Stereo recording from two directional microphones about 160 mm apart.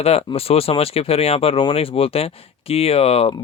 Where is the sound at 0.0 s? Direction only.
40° left (ahead or behind).